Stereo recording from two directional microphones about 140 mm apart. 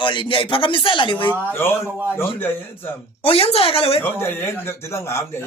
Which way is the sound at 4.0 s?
15° left (ahead or behind).